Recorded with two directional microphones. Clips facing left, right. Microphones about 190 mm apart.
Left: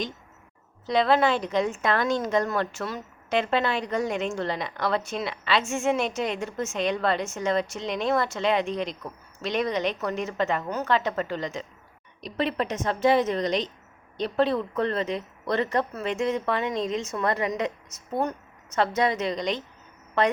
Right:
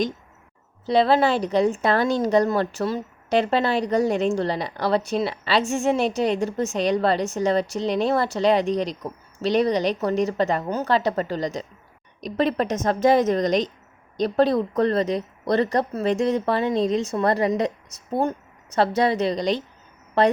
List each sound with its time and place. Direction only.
0.9 s a woman's voice: 30° right (ahead or behind)